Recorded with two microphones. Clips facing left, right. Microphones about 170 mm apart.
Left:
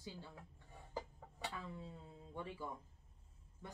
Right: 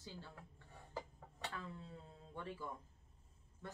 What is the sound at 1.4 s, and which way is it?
Speech, 10° left (ahead or behind).